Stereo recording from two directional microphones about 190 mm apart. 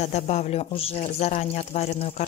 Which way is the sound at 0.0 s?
35° left (ahead or behind).